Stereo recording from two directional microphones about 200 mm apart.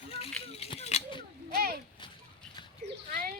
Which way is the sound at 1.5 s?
50° right (ahead or behind).